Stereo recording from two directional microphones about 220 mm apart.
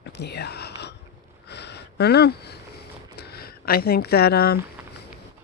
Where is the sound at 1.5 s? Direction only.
50° left (ahead or behind).